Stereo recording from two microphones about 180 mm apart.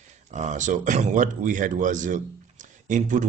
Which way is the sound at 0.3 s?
40° right (ahead or behind).